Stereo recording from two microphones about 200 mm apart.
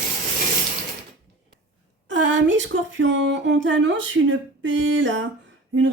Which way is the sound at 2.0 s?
65° right (ahead or behind).